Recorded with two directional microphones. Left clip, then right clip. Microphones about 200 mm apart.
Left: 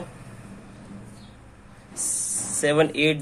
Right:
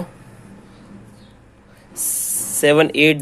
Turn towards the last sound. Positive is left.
turn(degrees=-45)  # may be behind; listen again after turning